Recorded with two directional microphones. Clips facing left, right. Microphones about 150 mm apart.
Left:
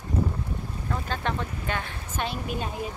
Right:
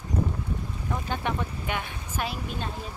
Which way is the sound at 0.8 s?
15° right (ahead or behind).